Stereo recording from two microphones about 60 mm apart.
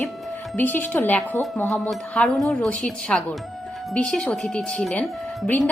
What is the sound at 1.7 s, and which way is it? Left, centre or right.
A woman's voice, centre.